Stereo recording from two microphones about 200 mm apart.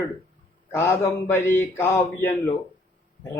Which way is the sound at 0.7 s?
10° left (ahead or behind).